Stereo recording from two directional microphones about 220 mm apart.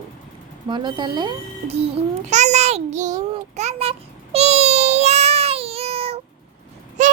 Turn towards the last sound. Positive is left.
turn(degrees=-35)  # may be behind; listen again after turning